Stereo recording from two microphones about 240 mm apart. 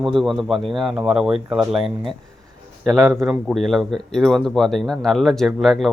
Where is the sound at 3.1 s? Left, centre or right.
Centre.